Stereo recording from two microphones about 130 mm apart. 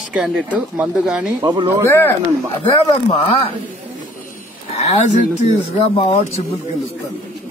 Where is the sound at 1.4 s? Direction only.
30° right (ahead or behind).